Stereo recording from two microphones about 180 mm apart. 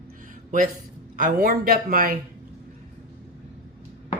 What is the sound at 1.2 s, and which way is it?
Speech, 50° right (ahead or behind).